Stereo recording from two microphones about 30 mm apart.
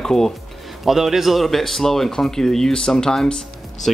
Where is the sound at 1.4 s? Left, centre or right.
Centre.